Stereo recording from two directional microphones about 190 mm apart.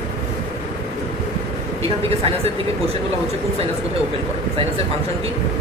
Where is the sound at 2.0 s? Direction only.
30° right (ahead or behind).